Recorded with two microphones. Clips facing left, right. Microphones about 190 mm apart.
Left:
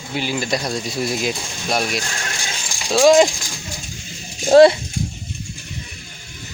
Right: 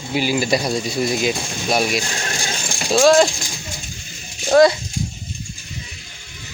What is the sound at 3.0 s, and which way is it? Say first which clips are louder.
Speech: left 1 dB; 15° left (ahead or behind).